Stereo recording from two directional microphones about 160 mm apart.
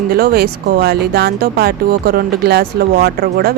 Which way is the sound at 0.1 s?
70° right (ahead or behind).